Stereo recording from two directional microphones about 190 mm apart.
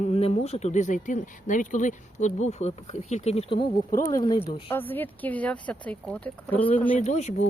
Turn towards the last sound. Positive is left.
turn(degrees=35)  # may be behind; listen again after turning